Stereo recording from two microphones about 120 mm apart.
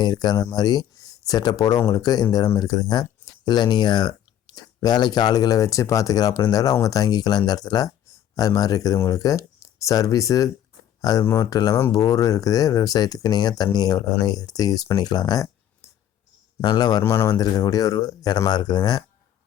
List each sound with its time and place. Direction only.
0.0 s speech: 35° left (ahead or behind)
16.6 s speech: 35° left (ahead or behind)
17.0 s speech: 20° left (ahead or behind); by 19.0 s 35° left (ahead or behind)